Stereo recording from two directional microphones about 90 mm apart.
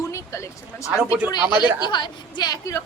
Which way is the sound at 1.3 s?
55° left (ahead or behind).